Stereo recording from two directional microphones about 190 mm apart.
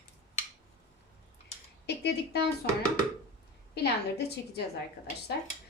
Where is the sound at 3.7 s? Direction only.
60° left (ahead or behind).